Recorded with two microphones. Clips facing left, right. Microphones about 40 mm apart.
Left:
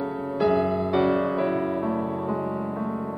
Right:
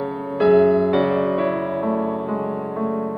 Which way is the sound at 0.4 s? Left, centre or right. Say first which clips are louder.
Right 8 dB; right.